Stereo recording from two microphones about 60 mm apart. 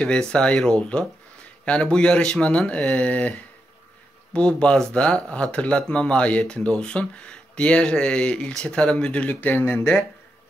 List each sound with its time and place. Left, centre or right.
0.0 s speech: centre
9.7 s speech: left